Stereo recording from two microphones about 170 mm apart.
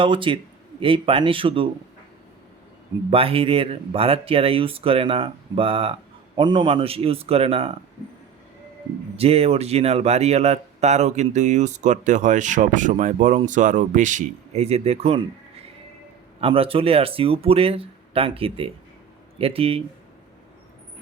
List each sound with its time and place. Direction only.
0.0 s speech: 30° right (ahead or behind)
3.1 s speech: 35° right (ahead or behind)
9.1 s speech: 35° right (ahead or behind)
16.4 s speech: 30° right (ahead or behind)